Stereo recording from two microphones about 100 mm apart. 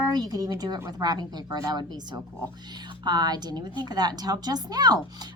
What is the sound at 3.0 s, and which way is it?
A woman's voice, 45° right (ahead or behind).